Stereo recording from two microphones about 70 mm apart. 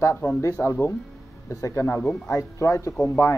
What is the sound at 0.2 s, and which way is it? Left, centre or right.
Speech, left.